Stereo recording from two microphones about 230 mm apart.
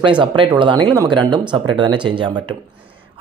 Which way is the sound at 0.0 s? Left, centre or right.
Right.